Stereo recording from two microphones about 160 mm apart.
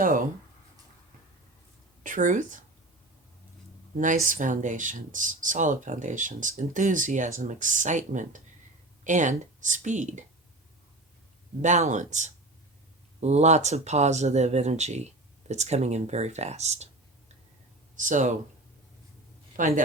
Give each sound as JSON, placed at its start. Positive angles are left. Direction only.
{"t": 0.0, "sound": "speech", "side_deg": -65}
{"t": 2.0, "sound": "speech", "side_deg": -55}
{"t": 3.9, "sound": "speech", "side_deg": -55}
{"t": 11.6, "sound": "speech", "side_deg": -50}
{"t": 19.5, "sound": "speech", "side_deg": -55}